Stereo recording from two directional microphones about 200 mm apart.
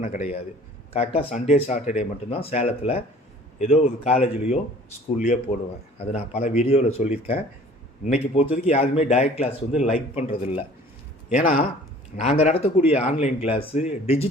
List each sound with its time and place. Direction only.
0.9 s a man's voice: 30° left (ahead or behind)
12.4 s a man's voice: 30° left (ahead or behind)